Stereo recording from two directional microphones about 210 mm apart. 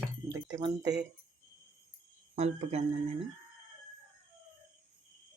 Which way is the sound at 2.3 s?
30° right (ahead or behind).